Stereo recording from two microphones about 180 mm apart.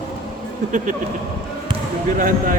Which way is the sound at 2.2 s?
45° right (ahead or behind).